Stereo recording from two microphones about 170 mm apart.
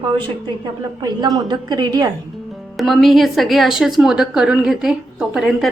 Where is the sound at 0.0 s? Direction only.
30° right (ahead or behind).